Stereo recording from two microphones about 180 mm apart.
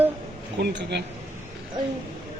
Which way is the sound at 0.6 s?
70° right (ahead or behind).